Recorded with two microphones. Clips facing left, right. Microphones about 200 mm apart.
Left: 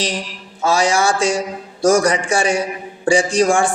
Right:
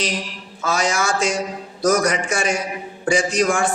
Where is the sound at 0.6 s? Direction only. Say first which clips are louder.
Left 5 dB; 30° left (ahead or behind).